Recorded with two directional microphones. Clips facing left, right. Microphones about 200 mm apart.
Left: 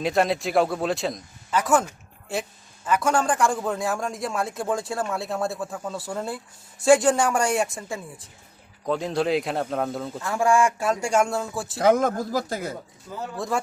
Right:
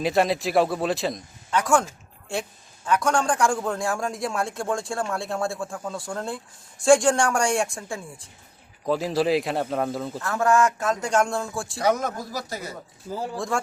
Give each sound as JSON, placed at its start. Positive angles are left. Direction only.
{"t": 0.0, "sound": "a man's voice", "side_deg": 0}
{"t": 10.3, "sound": "speech", "side_deg": 10}
{"t": 11.8, "sound": "speech", "side_deg": 55}
{"t": 13.3, "sound": "a man's voice", "side_deg": 5}